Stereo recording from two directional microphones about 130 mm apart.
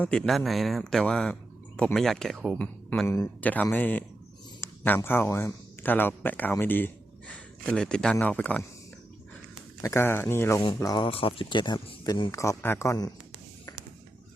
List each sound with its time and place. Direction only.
0.0 s speech: 5° left (ahead or behind)
4.6 s a sound: 15° left (ahead or behind)
5.0 s speech: 15° left (ahead or behind)
9.8 s speech: 20° left (ahead or behind)
11.0 s speech: 45° left (ahead or behind)
12.3 s speech: 25° left (ahead or behind)